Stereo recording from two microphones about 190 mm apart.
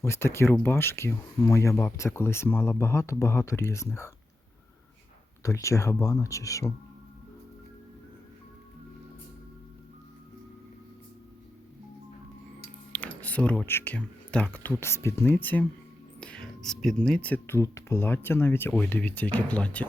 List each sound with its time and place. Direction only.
0.0 s speech: 15° left (ahead or behind)
5.4 s speech: 15° left (ahead or behind)
12.9 s speech: 10° left (ahead or behind)